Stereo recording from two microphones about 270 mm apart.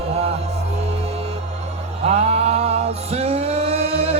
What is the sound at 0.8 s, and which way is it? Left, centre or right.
Music, right.